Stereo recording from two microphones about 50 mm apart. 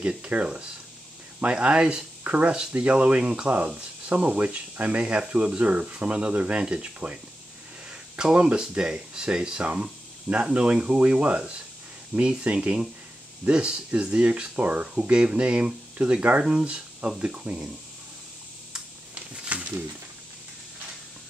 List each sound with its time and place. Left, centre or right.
0.2 s speech: right
8.2 s speech: centre
15.0 s speech: centre
19.1 s a sound: right